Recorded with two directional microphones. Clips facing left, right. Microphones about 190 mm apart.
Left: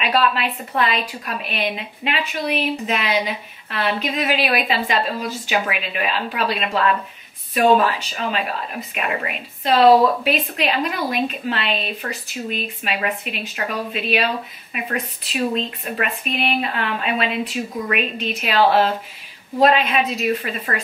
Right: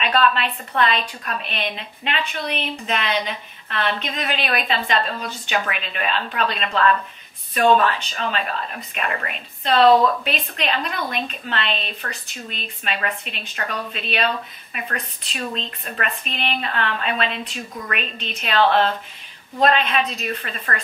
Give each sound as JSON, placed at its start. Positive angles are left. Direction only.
{"t": 0.0, "sound": "a woman's voice", "side_deg": 5}